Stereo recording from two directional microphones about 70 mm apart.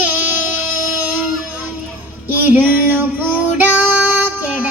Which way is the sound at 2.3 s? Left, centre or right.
Right.